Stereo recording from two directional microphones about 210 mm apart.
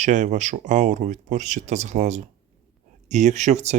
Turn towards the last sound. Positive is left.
turn(degrees=-35)  # may be behind; listen again after turning